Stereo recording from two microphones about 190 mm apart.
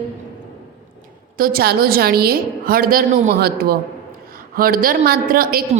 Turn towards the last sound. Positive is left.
turn(degrees=-50)  # may be behind; listen again after turning